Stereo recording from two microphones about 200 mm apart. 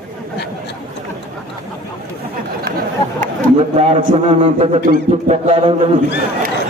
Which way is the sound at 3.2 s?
35° right (ahead or behind).